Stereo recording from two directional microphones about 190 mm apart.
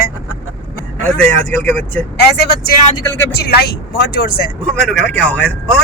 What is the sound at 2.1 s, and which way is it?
Speech, 55° left (ahead or behind).